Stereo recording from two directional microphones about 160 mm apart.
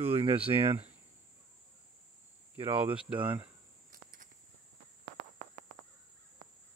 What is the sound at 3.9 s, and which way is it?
Cricket, 55° right (ahead or behind).